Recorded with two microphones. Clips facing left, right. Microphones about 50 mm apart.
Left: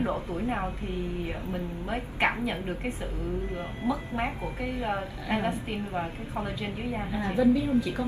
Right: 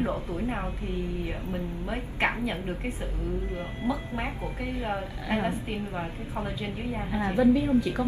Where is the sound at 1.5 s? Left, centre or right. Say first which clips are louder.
Even; centre.